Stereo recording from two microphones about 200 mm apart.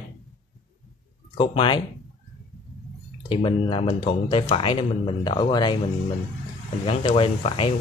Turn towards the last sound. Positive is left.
turn(degrees=25)  # may be behind; listen again after turning